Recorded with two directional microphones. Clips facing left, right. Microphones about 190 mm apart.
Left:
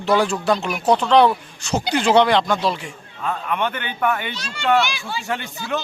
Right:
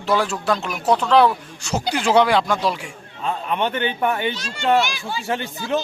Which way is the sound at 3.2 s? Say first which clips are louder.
Right 1 dB; 25° right (ahead or behind).